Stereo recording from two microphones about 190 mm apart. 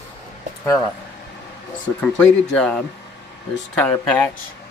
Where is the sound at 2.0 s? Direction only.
5° left (ahead or behind).